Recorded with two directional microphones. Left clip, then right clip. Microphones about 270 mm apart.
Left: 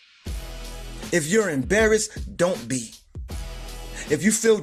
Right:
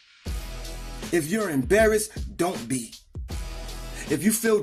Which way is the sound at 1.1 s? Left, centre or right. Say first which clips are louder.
Left 4 dB; right.